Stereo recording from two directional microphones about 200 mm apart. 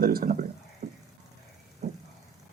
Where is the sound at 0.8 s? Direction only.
35° right (ahead or behind).